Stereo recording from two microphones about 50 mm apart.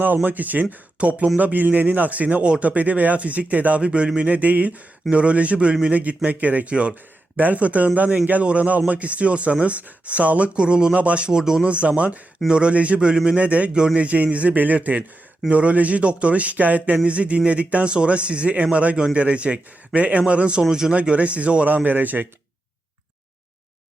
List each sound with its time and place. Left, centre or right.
0.0 s speech: right
0.9 s speech: right
1.4 s speech: right; by 11.6 s centre
11.6 s speech: right
20.6 s speech: centre
20.9 s speech: right